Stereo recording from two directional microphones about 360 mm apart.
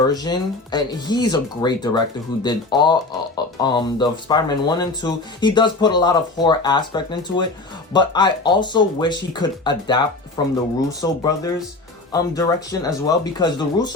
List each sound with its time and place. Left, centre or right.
0.1 s speech: centre